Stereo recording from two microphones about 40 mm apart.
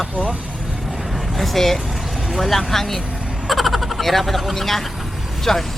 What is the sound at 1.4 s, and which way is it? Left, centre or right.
Speech, centre.